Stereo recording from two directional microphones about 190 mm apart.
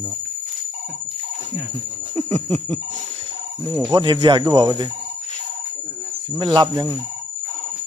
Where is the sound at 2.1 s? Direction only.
35° right (ahead or behind).